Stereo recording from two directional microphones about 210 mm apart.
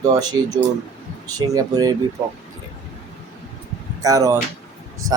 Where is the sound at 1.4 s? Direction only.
15° right (ahead or behind).